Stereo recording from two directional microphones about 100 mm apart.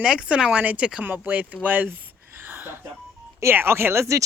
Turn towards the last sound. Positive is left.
turn(degrees=-30)  # may be behind; listen again after turning